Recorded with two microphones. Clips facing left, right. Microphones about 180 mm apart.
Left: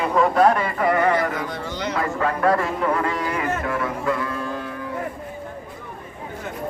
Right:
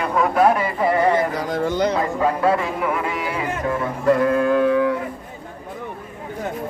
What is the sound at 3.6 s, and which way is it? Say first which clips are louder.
Speech: right 2 dB; 25° right (ahead or behind).